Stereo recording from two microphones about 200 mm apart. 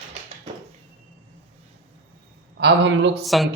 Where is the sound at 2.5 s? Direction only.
60° right (ahead or behind).